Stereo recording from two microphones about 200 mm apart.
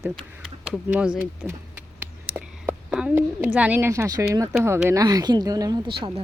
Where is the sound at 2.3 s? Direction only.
5° right (ahead or behind).